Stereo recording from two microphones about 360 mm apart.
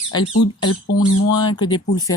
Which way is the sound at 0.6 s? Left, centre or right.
Left.